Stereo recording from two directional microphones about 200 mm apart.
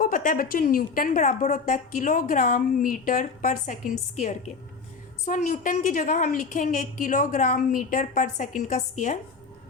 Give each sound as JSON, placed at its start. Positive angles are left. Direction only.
{"t": 0.0, "sound": "a woman's voice", "side_deg": 40}